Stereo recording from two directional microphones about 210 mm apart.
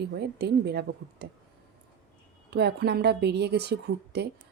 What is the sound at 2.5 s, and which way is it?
A woman's voice, 50° right (ahead or behind).